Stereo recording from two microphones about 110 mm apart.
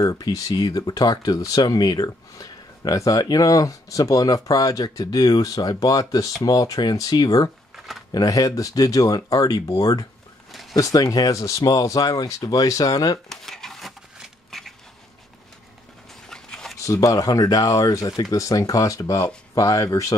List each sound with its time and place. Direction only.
0.0 s speech: 35° left (ahead or behind)
7.7 s a sound: centre (ahead or behind)
8.1 s speech: 35° left (ahead or behind)
13.3 s shuffling cards: 5° left (ahead or behind)
16.3 s dog: 5° left (ahead or behind)
16.8 s speech: 30° left (ahead or behind)